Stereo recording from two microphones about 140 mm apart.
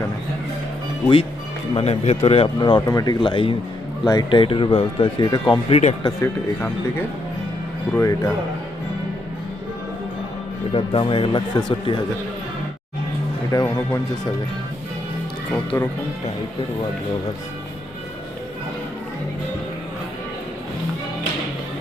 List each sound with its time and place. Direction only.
1.7 s speech: 45° left (ahead or behind); by 3.2 s 30° left (ahead or behind)
3.2 s speech: 40° left (ahead or behind)
5.6 s speech: 45° left (ahead or behind)
6.0 s speech: 30° left (ahead or behind)
7.9 s speech: 25° left (ahead or behind)
10.8 s speech: 35° left (ahead or behind)
13.5 s speech: 25° left (ahead or behind)
15.4 s speech: 10° left (ahead or behind)